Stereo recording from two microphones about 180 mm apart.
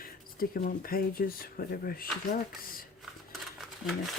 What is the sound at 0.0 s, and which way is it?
Speech, 50° left (ahead or behind).